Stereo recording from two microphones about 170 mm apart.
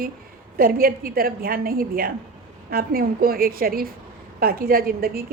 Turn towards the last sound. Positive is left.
turn(degrees=-60)  # may be behind; listen again after turning